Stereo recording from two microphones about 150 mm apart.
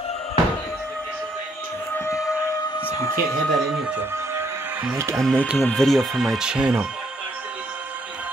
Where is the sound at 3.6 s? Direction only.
5° right (ahead or behind).